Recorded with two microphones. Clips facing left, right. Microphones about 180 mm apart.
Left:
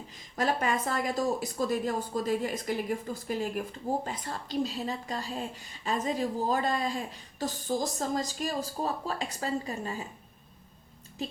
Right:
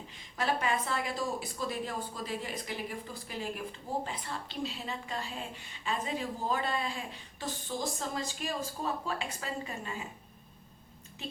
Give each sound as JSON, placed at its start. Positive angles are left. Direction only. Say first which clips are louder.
{"t": 0.3, "sound": "a woman's voice", "louder": "left 3 dB", "side_deg": 40}